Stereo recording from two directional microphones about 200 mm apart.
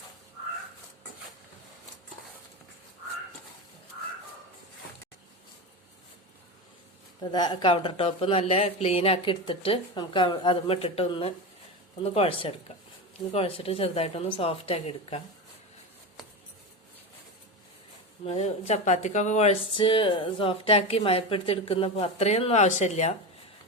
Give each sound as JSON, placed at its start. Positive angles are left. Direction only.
{"t": 7.2, "sound": "speech", "side_deg": 20}
{"t": 18.3, "sound": "speech", "side_deg": 35}